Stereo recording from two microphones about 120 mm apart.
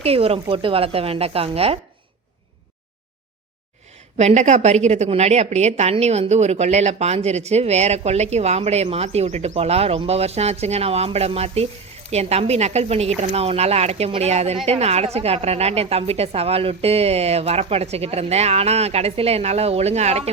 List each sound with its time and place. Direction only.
0.0 s speech: 55° right (ahead or behind)
4.2 s speech: 75° right (ahead or behind)